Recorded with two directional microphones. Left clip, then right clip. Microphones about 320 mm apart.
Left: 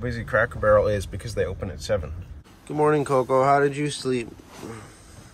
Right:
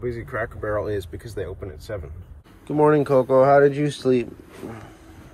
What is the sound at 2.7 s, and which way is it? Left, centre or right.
Speech, centre.